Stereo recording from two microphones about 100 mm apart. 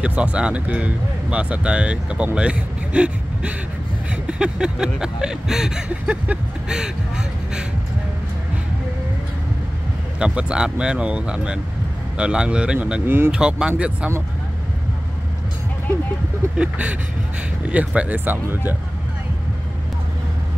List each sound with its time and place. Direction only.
0.0 s speech: 10° right (ahead or behind)
10.1 s speech: 10° right (ahead or behind)
13.0 s speech: 20° right (ahead or behind)
13.3 s speech: 10° right (ahead or behind)
16.5 s speech: 10° right (ahead or behind)